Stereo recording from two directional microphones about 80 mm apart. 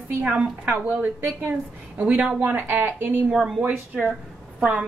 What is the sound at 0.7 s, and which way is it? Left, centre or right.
Speech, right.